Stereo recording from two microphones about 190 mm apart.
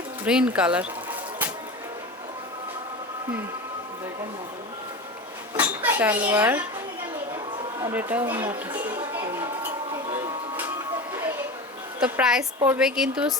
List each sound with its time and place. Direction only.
0.3 s a woman's voice: 5° right (ahead or behind)
5.5 s dishes: 10° right (ahead or behind)
7.8 s speech: 15° right (ahead or behind)
8.4 s speech: 20° right (ahead or behind)
8.8 s a sound: 10° right (ahead or behind)
11.9 s a woman's voice: 5° right (ahead or behind)